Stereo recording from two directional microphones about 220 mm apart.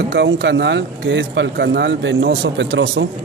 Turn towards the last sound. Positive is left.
turn(degrees=-55)  # may be behind; listen again after turning